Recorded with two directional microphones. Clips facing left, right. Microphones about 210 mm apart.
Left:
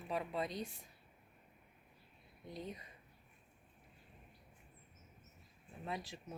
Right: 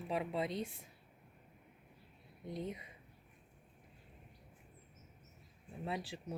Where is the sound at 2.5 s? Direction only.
20° right (ahead or behind).